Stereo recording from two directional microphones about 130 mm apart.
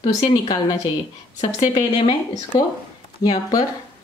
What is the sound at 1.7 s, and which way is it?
Speech, 35° left (ahead or behind).